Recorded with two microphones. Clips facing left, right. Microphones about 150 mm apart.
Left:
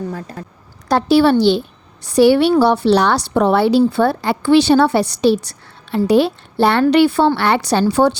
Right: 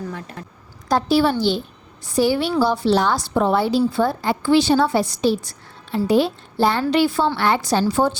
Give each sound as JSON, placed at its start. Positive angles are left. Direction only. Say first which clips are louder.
{"t": 0.1, "sound": "a woman's voice", "louder": "left 4 dB", "side_deg": 35}
{"t": 0.9, "sound": "a woman's voice", "louder": "left 5 dB", "side_deg": 70}